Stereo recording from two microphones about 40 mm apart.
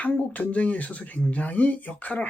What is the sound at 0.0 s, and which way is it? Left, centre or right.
Speech, left.